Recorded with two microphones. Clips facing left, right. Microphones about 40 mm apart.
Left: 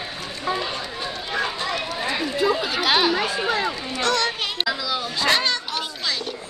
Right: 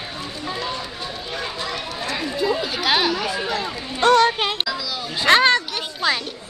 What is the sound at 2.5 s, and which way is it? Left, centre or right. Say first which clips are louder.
Chatter: right 1 dB; centre.